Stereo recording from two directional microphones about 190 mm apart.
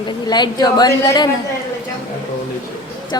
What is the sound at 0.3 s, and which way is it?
Speech, 20° left (ahead or behind).